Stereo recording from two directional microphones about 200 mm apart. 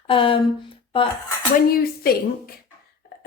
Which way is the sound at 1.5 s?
50° left (ahead or behind).